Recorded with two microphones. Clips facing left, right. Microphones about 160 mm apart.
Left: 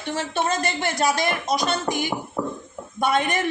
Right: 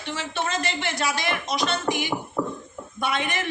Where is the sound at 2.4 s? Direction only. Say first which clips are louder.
Even; 10° left (ahead or behind).